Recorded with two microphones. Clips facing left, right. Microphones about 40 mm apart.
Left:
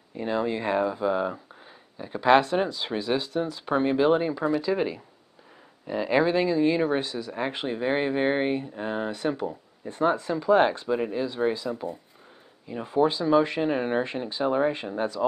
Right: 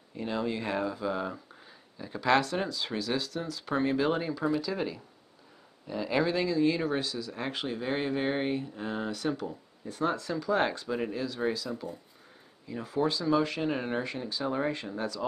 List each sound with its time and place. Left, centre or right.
0.1 s speech: left